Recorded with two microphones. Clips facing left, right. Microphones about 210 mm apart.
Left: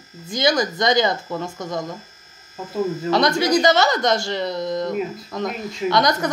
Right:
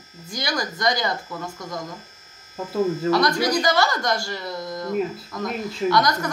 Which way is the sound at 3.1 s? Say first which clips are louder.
Left 6 dB; 20° left (ahead or behind).